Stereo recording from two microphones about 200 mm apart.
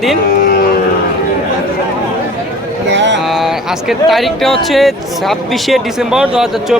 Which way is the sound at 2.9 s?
60° right (ahead or behind).